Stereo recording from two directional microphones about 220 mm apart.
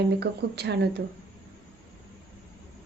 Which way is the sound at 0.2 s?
50° right (ahead or behind).